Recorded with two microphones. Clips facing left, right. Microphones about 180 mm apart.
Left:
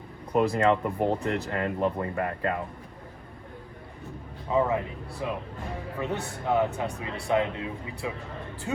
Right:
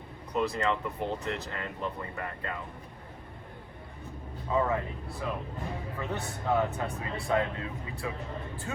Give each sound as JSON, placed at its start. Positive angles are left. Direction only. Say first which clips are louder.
{"t": 0.3, "sound": "speech", "louder": "left 6 dB", "side_deg": 55}
{"t": 4.5, "sound": "speech", "louder": "left 3 dB", "side_deg": 15}